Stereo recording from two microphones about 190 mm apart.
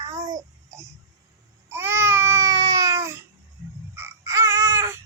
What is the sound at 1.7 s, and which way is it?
Baby cry, 15° right (ahead or behind).